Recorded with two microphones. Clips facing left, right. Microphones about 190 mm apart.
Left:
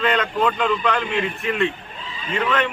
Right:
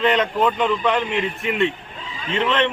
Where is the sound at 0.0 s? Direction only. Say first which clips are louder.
Right 2 dB; 20° right (ahead or behind).